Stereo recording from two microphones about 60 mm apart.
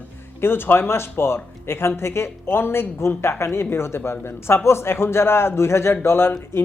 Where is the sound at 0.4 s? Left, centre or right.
Left.